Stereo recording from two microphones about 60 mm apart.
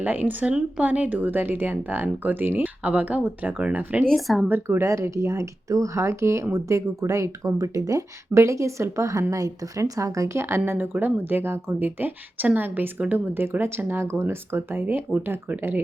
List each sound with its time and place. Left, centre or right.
0.0 s speech: right
4.1 s speech: centre
4.8 s speech: right
9.3 s speech: right
10.7 s speech: right